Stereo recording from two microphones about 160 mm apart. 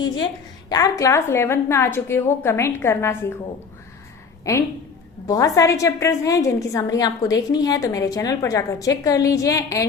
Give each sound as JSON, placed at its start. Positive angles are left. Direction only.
{"t": 0.7, "sound": "a woman's voice", "side_deg": 20}
{"t": 4.5, "sound": "a woman's voice", "side_deg": 20}